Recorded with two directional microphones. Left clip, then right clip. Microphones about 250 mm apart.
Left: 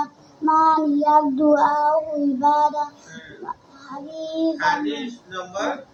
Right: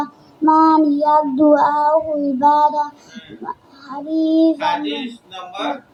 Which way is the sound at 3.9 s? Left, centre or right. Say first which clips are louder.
Right 6 dB; right.